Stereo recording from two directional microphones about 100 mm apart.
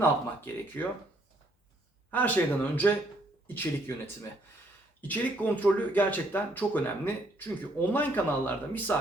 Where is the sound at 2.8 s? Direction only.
20° left (ahead or behind).